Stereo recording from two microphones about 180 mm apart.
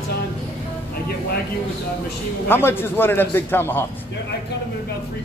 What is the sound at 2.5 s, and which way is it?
A man's voice, 10° left (ahead or behind).